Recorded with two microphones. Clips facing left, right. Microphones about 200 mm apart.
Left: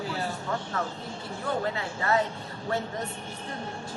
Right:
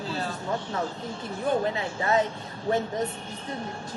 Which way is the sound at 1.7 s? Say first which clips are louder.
Right 2 dB; 20° right (ahead or behind).